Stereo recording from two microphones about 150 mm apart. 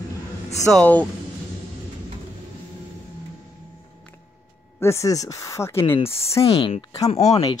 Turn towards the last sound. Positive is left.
turn(degrees=45)  # may be behind; listen again after turning